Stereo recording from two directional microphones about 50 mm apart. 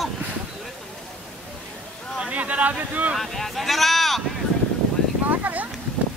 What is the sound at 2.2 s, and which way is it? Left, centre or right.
Speech, right.